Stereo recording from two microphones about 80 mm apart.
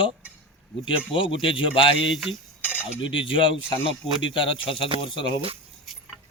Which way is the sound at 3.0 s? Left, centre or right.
Left.